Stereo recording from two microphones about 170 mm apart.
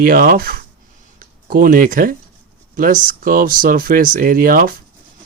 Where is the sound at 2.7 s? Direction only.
55° right (ahead or behind).